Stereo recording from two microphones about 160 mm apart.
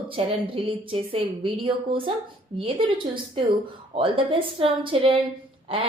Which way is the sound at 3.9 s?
35° right (ahead or behind).